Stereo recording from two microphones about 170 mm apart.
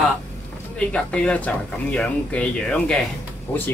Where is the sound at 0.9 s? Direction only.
5° left (ahead or behind).